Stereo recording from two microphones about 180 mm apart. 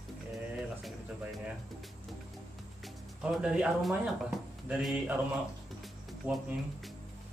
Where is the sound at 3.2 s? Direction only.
5° right (ahead or behind).